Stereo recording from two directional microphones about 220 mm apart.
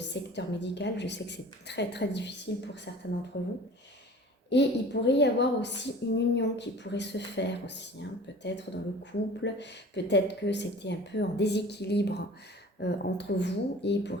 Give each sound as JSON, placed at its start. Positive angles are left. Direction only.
{"t": 0.1, "sound": "a woman's voice", "side_deg": 50}
{"t": 3.3, "sound": "a woman's voice", "side_deg": 50}